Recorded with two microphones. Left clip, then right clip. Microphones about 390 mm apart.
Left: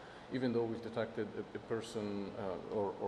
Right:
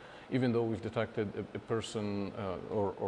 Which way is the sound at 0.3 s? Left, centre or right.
Right.